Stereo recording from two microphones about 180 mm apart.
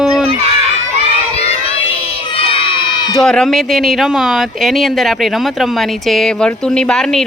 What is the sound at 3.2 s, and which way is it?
Speech, 5° left (ahead or behind).